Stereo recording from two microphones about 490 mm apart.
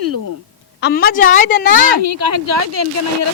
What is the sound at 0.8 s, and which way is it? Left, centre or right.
A woman's voice, centre.